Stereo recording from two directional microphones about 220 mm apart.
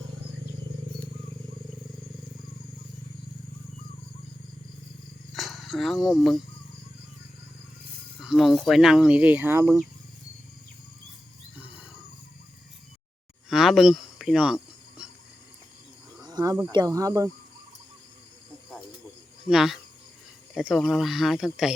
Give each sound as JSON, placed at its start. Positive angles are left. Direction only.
{"t": 5.3, "sound": "roaring cats", "side_deg": 0}
{"t": 8.2, "sound": "speech", "side_deg": 0}
{"t": 11.5, "sound": "wild animals", "side_deg": -5}
{"t": 13.5, "sound": "a sound", "side_deg": 0}
{"t": 16.2, "sound": "a sound", "side_deg": -15}
{"t": 16.7, "sound": "speech", "side_deg": -15}
{"t": 19.5, "sound": "speech", "side_deg": 0}